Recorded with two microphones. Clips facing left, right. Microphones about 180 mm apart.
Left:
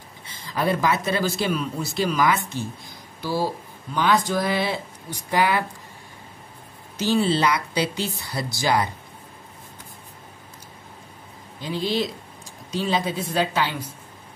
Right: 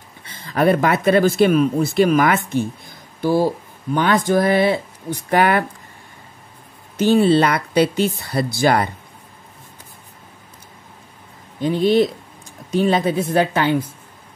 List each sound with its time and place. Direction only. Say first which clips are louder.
0.2 s speech: right 8 dB; 55° right (ahead or behind)
7.0 s speech: right 7 dB; 55° right (ahead or behind)
11.6 s a man's voice: right 9 dB; 55° right (ahead or behind)